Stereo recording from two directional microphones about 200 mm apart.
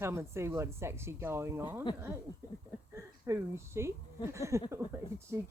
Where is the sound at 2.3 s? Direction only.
25° left (ahead or behind).